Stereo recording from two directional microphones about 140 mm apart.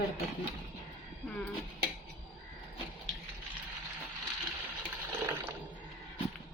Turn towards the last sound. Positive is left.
turn(degrees=-15)  # may be behind; listen again after turning